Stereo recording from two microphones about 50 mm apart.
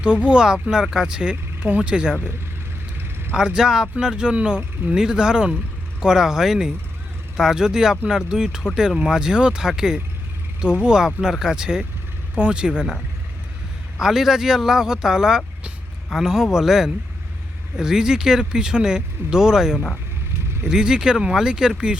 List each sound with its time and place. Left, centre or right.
0.0 s speech: centre
3.3 s speech: centre
14.0 s speech: centre